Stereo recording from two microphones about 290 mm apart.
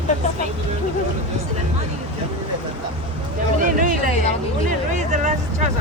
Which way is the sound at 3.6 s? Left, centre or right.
Right.